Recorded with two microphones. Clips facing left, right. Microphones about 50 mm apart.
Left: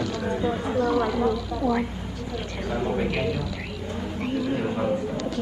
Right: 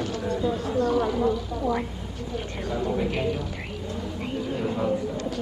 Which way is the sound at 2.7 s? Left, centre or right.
Left.